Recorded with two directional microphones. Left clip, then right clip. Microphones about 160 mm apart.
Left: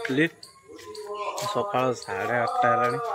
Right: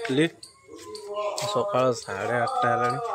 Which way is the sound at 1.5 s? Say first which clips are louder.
Right 2 dB; 15° right (ahead or behind).